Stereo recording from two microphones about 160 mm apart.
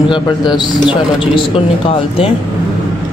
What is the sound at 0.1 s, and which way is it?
Speech, 25° left (ahead or behind).